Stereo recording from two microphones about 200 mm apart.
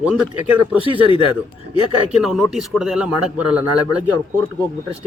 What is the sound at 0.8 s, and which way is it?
Speech, 25° left (ahead or behind).